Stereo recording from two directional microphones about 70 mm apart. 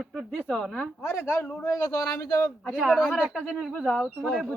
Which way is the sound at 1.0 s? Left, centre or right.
Left.